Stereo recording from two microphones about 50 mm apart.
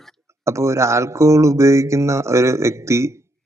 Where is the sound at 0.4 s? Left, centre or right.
Right.